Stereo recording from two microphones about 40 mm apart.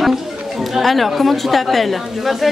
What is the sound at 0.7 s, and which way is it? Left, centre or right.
Speech, centre.